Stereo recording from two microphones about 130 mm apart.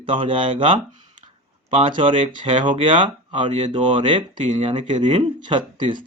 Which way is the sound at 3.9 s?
40° right (ahead or behind).